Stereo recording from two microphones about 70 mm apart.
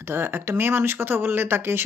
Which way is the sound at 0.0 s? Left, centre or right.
Right.